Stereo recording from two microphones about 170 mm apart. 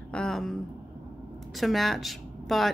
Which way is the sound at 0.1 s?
5° left (ahead or behind).